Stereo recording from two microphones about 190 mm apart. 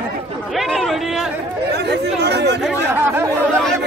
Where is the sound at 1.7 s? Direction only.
60° right (ahead or behind).